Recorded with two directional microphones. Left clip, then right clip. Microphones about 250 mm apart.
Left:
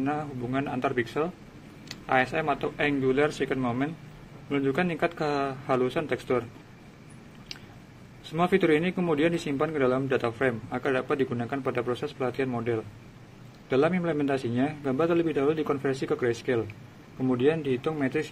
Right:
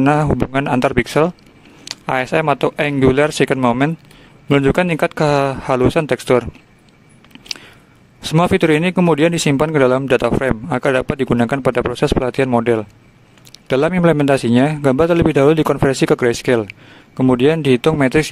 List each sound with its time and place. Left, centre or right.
0.0 s speech: right
8.2 s speech: right